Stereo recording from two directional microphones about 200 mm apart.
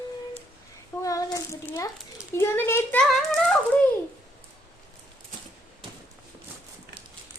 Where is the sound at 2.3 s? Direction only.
10° left (ahead or behind).